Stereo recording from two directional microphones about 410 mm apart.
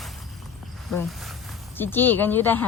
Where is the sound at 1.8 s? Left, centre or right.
Centre.